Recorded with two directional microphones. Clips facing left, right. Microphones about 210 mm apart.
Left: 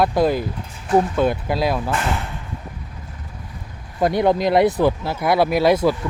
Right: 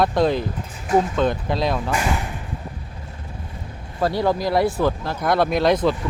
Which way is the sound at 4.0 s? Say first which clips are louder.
Left 3 dB; 20° left (ahead or behind).